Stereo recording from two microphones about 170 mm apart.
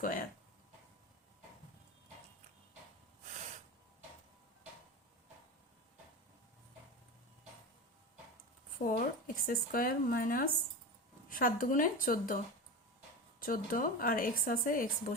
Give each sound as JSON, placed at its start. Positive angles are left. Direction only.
{"t": 0.0, "sound": "a woman's voice", "side_deg": 55}
{"t": 8.8, "sound": "a woman's voice", "side_deg": 50}
{"t": 13.4, "sound": "speech", "side_deg": 55}